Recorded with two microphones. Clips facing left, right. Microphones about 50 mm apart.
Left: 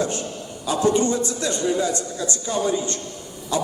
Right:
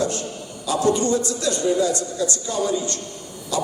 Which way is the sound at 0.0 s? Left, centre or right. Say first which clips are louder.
Right 1 dB; left.